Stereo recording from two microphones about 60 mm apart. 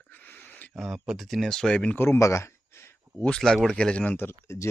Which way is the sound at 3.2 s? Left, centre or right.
Centre.